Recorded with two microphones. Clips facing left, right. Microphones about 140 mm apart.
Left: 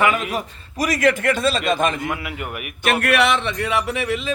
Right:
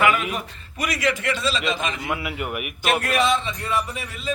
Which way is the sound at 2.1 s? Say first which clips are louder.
Right 1 dB; 10° right (ahead or behind).